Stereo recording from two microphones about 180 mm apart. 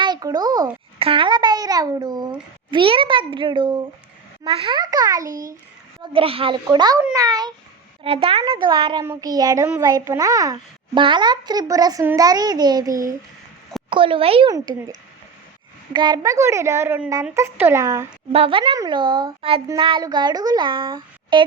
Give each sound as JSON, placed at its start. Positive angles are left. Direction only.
{"t": 0.0, "sound": "a child's voice", "side_deg": -20}
{"t": 6.1, "sound": "a child's voice", "side_deg": -30}
{"t": 8.0, "sound": "a child's voice", "side_deg": -30}
{"t": 9.6, "sound": "a woman's voice", "side_deg": -10}
{"t": 13.9, "sound": "a child's voice", "side_deg": -30}
{"t": 14.5, "sound": "a child's voice", "side_deg": -20}
{"t": 15.9, "sound": "a woman's voice", "side_deg": -25}
{"t": 18.3, "sound": "a child's voice", "side_deg": -30}